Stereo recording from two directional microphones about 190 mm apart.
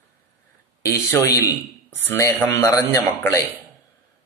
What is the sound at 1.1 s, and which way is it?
Speech, 15° left (ahead or behind).